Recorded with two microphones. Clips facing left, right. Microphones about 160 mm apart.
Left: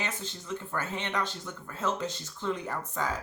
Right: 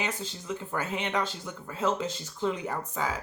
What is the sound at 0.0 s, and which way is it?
Speech, 10° right (ahead or behind).